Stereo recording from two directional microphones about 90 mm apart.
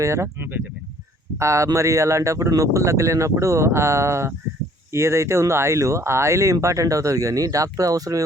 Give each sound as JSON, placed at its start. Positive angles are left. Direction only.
{"t": 0.0, "sound": "speech", "side_deg": -30}
{"t": 1.4, "sound": "speech", "side_deg": -35}